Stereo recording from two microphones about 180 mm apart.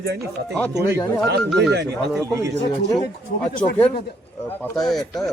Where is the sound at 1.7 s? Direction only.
70° right (ahead or behind).